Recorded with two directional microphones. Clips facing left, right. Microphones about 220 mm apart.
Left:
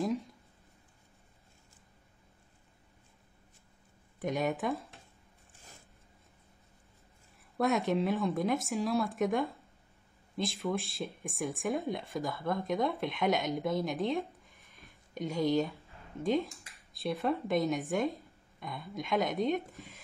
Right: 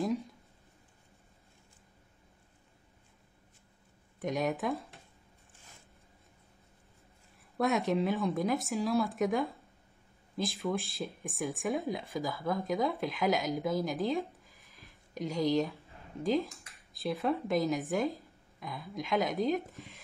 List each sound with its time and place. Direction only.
4.2 s speech: centre (ahead or behind)
7.5 s speech: centre (ahead or behind)